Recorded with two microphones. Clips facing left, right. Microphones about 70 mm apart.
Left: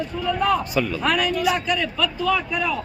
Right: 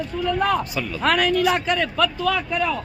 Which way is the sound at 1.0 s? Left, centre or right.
Right.